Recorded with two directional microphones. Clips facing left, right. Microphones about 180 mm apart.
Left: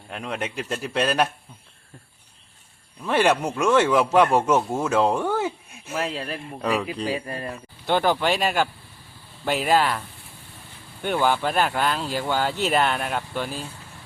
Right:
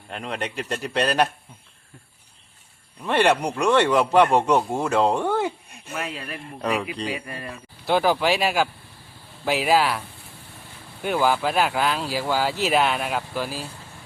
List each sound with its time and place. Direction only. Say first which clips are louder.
0.1 s speech: even; centre (ahead or behind)
3.0 s speech: even; centre (ahead or behind)
5.9 s speech: left 4 dB; 35° left (ahead or behind)
6.6 s speech: even; centre (ahead or behind)
7.1 s speech: left 3 dB; 30° left (ahead or behind)
7.9 s speech: right 1 dB; 5° right (ahead or behind)
11.0 s speech: right 1 dB; 5° right (ahead or behind)